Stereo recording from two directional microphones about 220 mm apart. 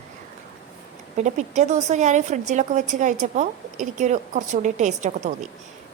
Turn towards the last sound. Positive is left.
turn(degrees=-30)  # may be behind; listen again after turning